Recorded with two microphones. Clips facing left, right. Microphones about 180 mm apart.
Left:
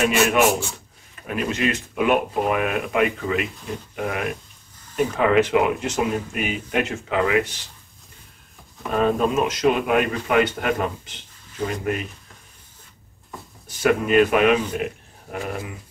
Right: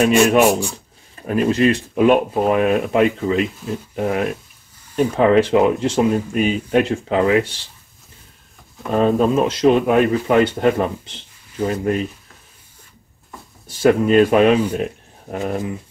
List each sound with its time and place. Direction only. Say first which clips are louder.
0.0 s speech: right 5 dB; 35° right (ahead or behind)
8.9 s a man's voice: right 4 dB; 30° right (ahead or behind)
13.7 s speech: right 5 dB; 30° right (ahead or behind)
15.3 s speech: right 4 dB; 20° right (ahead or behind)